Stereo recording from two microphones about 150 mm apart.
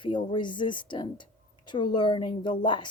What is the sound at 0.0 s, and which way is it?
Speech, 30° left (ahead or behind).